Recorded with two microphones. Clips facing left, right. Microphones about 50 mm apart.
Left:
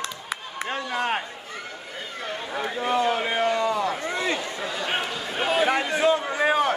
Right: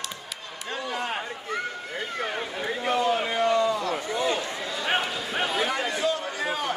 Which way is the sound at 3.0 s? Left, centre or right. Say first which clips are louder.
Left 1 dB; left.